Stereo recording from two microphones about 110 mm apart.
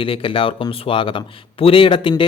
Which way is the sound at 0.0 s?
55° left (ahead or behind).